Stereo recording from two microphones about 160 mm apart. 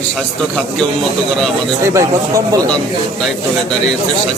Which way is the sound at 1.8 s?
20° right (ahead or behind).